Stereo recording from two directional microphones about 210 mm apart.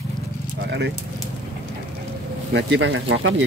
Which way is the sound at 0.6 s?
55° right (ahead or behind).